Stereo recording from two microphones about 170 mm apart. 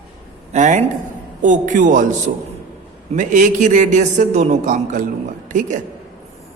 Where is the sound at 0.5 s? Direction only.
45° right (ahead or behind).